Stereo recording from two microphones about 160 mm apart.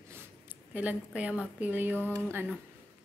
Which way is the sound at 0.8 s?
10° right (ahead or behind).